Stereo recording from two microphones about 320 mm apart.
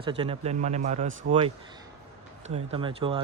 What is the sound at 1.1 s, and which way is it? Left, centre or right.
Speech, right.